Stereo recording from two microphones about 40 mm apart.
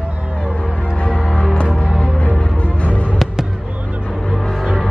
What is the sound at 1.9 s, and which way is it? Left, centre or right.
Music, right.